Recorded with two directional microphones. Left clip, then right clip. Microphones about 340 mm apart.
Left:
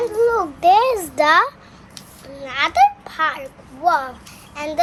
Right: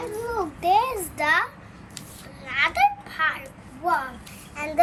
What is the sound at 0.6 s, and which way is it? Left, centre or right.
Speech, left.